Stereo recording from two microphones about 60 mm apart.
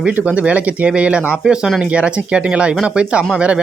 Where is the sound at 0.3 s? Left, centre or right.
Right.